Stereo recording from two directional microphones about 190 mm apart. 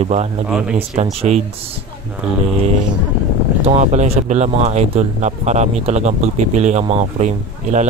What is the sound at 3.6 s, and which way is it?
Speech, 35° right (ahead or behind).